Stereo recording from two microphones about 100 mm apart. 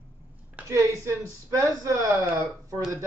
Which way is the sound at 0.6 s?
15° right (ahead or behind).